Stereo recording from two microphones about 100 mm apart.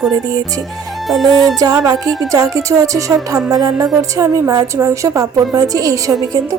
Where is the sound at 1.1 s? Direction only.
Centre (ahead or behind).